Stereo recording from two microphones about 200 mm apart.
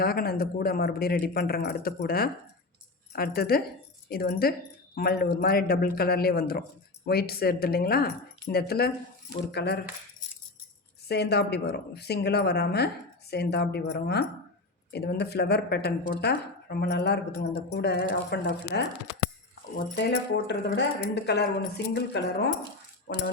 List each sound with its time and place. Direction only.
0.0 s speech: 50° left (ahead or behind)
11.1 s speech: 55° left (ahead or behind)
20.0 s speech: 55° left (ahead or behind)